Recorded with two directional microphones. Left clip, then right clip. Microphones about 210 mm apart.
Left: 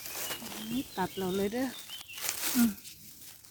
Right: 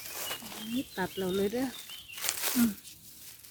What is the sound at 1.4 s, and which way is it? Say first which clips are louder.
Speech: right 2 dB; 35° left (ahead or behind).